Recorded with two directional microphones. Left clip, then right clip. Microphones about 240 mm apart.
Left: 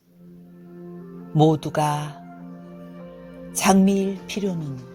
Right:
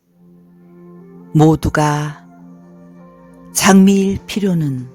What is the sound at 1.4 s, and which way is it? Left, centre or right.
Music, right.